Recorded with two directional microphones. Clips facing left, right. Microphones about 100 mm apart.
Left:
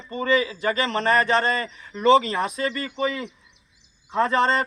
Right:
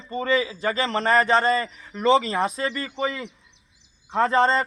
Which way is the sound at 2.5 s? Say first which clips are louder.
Left 1 dB; 30° right (ahead or behind).